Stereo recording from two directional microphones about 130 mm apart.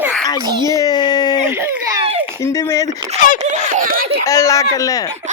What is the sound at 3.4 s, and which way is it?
Speech, 70° right (ahead or behind).